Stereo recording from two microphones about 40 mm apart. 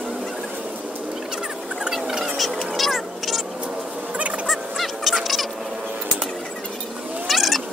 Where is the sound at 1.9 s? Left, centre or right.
Centre.